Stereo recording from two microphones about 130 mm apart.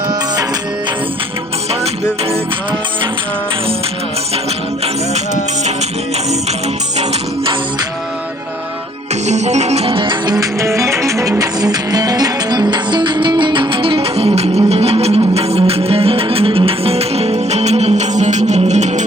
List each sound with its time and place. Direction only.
5.1 s music: 60° right (ahead or behind)
9.2 s music: 60° right (ahead or behind)